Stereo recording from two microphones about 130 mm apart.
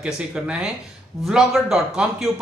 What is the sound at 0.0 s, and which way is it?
Speech, 10° right (ahead or behind).